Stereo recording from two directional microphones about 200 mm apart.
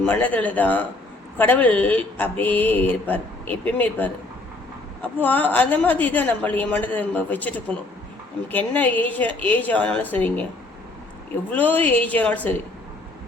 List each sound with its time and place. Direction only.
0.0 s speech: 10° left (ahead or behind)
11.5 s speech: 10° left (ahead or behind)